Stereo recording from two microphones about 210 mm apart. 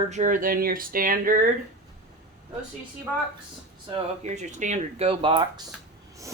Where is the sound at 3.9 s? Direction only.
35° right (ahead or behind).